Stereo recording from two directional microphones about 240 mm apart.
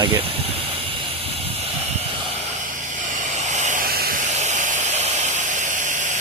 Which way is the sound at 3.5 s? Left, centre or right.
Right.